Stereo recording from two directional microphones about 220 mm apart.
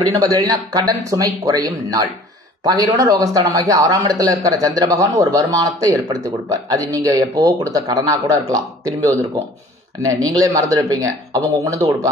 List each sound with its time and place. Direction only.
0.5 s a man's voice: 15° right (ahead or behind)